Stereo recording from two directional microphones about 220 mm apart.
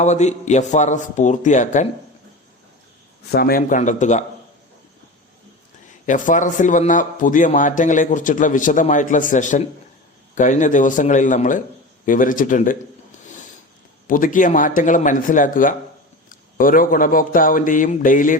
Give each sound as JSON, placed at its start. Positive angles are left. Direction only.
{"t": 0.0, "sound": "a man's voice", "side_deg": 30}
{"t": 3.3, "sound": "a man's voice", "side_deg": 40}
{"t": 6.1, "sound": "a man's voice", "side_deg": 35}